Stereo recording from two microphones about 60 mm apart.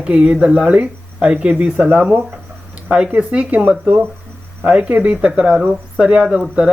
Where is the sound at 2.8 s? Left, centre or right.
Centre.